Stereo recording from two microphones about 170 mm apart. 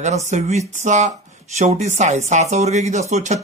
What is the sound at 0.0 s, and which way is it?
A man's voice, 45° right (ahead or behind).